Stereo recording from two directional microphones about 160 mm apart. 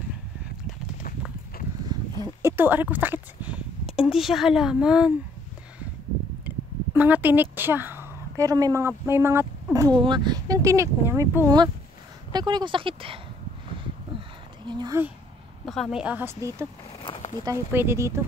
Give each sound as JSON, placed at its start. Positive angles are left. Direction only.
{"t": 1.9, "sound": "a sound", "side_deg": -25}
{"t": 2.2, "sound": "speech", "side_deg": -15}
{"t": 6.4, "sound": "speech", "side_deg": -10}
{"t": 14.6, "sound": "speech", "side_deg": -30}
{"t": 15.6, "sound": "a woman's voice", "side_deg": 0}